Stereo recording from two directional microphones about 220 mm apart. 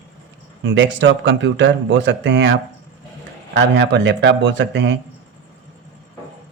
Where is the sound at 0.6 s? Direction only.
55° right (ahead or behind).